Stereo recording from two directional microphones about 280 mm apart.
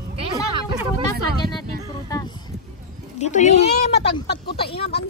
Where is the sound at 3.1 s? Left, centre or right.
Left.